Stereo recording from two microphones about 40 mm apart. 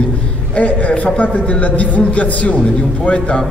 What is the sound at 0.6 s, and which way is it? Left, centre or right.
A man's voice, left.